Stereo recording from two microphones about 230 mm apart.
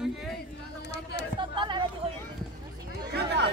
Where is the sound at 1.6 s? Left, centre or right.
Right.